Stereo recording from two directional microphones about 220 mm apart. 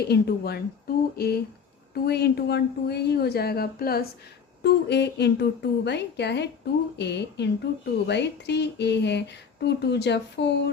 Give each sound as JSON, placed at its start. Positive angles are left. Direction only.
{"t": 0.1, "sound": "a woman's voice", "side_deg": 45}